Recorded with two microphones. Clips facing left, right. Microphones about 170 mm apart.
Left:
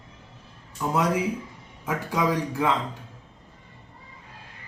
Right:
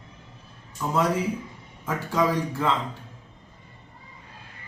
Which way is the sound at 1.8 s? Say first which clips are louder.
Right 1 dB; 15° left (ahead or behind).